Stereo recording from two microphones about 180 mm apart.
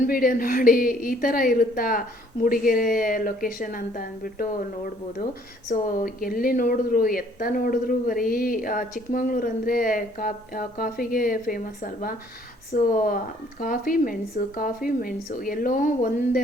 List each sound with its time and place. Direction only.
0.0 s speech: 50° left (ahead or behind)
5.6 s speech: 50° left (ahead or behind)